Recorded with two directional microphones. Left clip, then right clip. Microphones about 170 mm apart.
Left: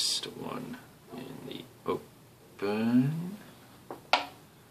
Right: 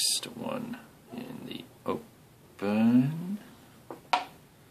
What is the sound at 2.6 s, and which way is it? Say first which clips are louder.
Speech: right 2 dB; 45° right (ahead or behind).